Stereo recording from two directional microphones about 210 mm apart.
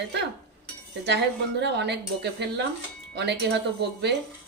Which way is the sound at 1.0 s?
55° right (ahead or behind).